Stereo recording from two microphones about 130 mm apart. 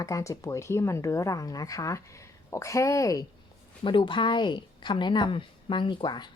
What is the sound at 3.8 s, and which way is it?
A woman's voice, 40° left (ahead or behind).